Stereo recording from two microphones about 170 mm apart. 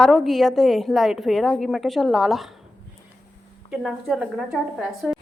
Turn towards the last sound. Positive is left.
turn(degrees=0)  # may be behind; listen again after turning